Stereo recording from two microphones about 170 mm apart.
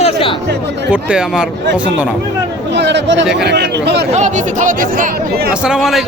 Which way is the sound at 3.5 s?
80° right.